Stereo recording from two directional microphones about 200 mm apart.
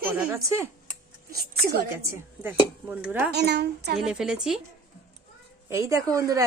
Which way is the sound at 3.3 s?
55° right (ahead or behind).